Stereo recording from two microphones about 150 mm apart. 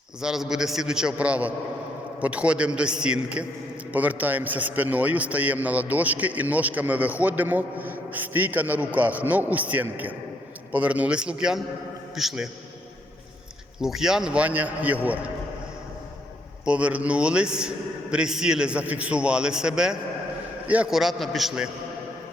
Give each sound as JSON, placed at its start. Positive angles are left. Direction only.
{"t": 0.2, "sound": "a man's voice", "side_deg": -5}
{"t": 13.8, "sound": "a man's voice", "side_deg": -5}
{"t": 16.6, "sound": "a man's voice", "side_deg": -10}